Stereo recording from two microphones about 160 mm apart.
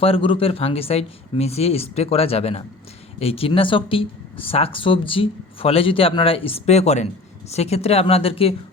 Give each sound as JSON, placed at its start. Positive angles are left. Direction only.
{"t": 0.0, "sound": "speech", "side_deg": 35}